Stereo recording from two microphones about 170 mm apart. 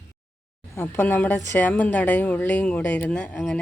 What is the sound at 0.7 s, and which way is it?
A woman's voice, 15° left (ahead or behind).